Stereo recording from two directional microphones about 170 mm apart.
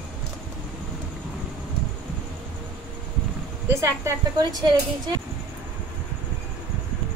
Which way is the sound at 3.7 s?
15° right (ahead or behind).